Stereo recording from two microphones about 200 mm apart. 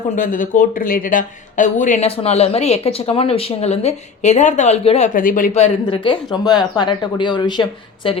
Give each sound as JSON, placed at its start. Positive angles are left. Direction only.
{"t": 0.2, "sound": "speech", "side_deg": 40}